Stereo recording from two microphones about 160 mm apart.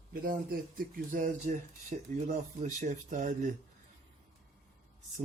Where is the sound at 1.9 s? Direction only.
45° right (ahead or behind).